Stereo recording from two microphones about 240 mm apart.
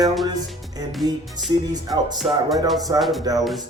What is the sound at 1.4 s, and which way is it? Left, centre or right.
Speech, centre.